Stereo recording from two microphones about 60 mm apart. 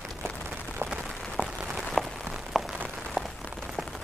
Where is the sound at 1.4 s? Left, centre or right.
Right.